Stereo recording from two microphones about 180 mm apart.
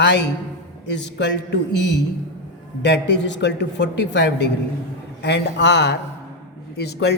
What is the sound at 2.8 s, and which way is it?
A man's voice, 75° left (ahead or behind).